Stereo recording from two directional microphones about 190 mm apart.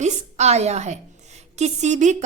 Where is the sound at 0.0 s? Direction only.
35° right (ahead or behind).